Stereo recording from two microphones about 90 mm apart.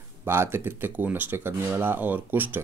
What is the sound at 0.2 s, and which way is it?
Speech, 25° right (ahead or behind).